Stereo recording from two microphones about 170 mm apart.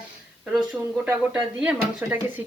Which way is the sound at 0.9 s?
10° right (ahead or behind).